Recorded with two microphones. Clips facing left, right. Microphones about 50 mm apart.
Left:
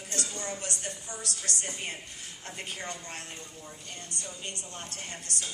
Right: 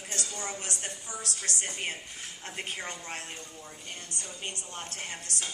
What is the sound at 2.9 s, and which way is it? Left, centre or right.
Speech, right.